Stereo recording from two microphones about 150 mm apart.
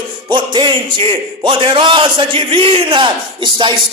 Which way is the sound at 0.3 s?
30° right (ahead or behind).